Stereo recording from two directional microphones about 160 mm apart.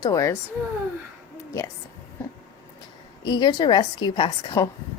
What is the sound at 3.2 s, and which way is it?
A woman's voice, 30° left (ahead or behind).